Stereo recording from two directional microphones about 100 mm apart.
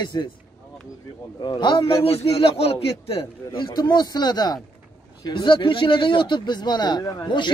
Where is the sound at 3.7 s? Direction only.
45° left (ahead or behind).